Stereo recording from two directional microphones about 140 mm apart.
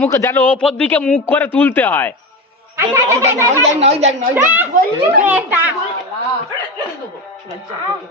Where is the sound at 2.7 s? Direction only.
20° right (ahead or behind).